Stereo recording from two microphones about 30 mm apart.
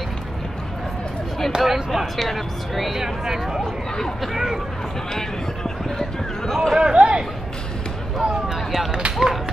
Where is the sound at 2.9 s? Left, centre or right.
Centre.